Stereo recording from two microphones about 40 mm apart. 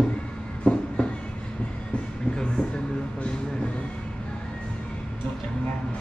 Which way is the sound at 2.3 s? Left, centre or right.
Left.